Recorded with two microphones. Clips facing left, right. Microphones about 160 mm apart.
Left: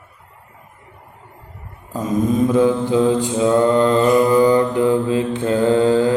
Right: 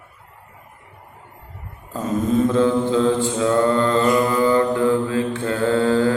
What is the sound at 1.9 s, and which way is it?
Mantra, 10° left (ahead or behind).